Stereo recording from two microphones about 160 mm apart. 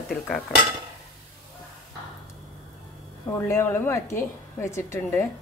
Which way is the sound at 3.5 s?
15° left (ahead or behind).